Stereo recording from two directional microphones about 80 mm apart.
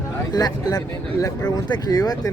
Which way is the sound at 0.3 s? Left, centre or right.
Left.